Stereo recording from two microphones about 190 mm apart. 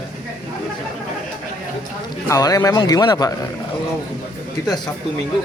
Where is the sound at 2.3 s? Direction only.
20° left (ahead or behind).